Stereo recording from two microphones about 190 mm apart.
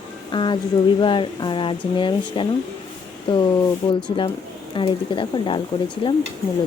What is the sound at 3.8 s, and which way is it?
Speech, 25° left (ahead or behind).